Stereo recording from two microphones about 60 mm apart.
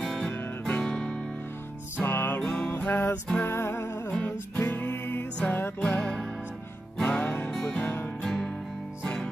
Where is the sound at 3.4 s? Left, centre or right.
Left.